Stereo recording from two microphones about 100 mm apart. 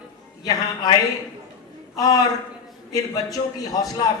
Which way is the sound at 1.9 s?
35° left (ahead or behind).